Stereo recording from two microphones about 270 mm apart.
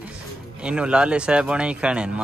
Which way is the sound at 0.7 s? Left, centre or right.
Centre.